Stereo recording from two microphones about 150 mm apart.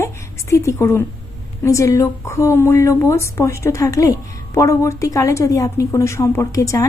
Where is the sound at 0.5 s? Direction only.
20° left (ahead or behind).